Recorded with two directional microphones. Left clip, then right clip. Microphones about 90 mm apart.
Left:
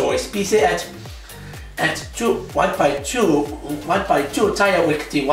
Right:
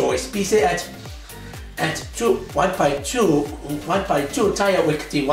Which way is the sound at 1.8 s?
10° right (ahead or behind).